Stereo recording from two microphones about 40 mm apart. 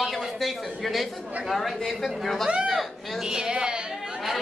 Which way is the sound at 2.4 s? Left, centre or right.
Right.